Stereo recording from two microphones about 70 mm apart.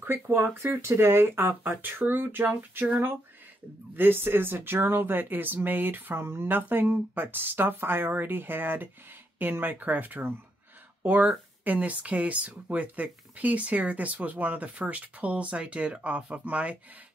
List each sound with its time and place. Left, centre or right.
0.0 s speech: right